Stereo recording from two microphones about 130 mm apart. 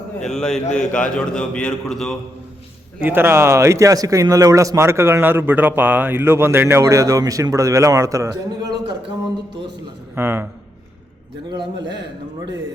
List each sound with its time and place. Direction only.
0.3 s a man's voice: 5° left (ahead or behind)
3.0 s a man's voice: 15° right (ahead or behind)
10.2 s speech: 15° right (ahead or behind)